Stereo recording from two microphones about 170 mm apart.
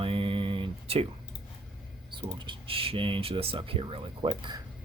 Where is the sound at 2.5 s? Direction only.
30° right (ahead or behind).